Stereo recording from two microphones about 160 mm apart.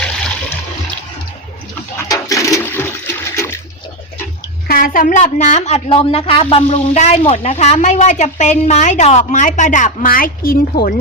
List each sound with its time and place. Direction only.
2.0 s toilet flush: 20° left (ahead or behind)
4.7 s a woman's voice: 60° left (ahead or behind)